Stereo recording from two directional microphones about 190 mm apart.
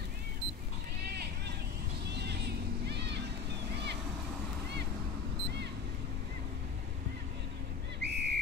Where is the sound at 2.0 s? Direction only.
60° right (ahead or behind).